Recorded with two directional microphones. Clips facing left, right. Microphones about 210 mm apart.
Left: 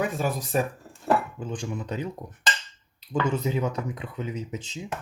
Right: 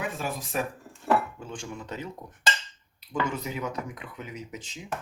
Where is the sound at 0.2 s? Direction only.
40° left (ahead or behind).